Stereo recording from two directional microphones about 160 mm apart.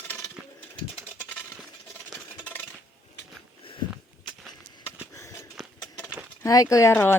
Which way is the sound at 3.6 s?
35° left (ahead or behind).